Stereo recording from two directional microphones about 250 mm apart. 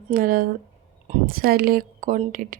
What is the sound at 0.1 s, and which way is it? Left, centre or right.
Speech, right.